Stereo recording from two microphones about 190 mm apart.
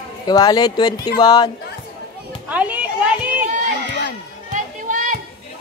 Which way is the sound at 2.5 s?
10° right (ahead or behind).